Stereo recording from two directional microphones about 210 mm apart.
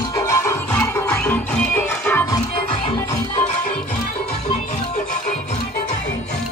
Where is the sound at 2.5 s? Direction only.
25° left (ahead or behind).